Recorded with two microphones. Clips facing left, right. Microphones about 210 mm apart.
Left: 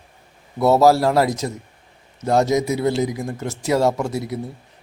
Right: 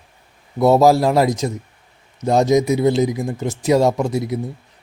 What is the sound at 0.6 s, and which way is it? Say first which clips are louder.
A man's voice: right 2 dB; 15° right (ahead or behind).